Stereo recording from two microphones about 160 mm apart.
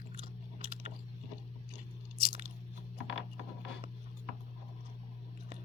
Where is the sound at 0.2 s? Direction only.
40° right (ahead or behind).